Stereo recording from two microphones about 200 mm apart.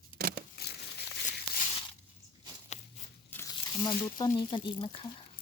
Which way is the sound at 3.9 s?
20° left (ahead or behind).